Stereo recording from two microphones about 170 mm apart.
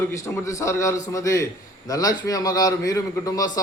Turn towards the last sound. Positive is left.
turn(degrees=20)  # may be behind; listen again after turning